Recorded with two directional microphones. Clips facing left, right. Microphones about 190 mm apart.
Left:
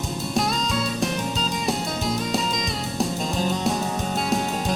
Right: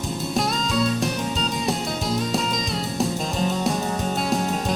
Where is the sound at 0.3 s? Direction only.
Centre (ahead or behind).